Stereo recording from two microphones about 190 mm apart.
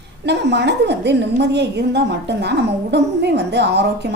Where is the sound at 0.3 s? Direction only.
65° right (ahead or behind).